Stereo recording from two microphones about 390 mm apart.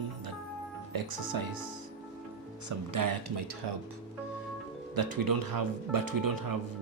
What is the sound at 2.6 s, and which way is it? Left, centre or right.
Speech, right.